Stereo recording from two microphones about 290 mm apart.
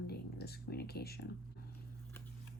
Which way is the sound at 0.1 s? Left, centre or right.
Left.